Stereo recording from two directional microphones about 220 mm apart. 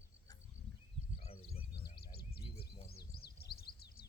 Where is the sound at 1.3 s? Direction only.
45° left (ahead or behind).